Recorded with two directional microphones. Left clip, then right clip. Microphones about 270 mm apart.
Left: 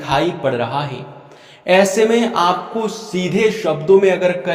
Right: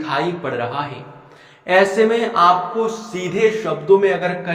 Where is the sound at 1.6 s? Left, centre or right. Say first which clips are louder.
Left 1 dB; left.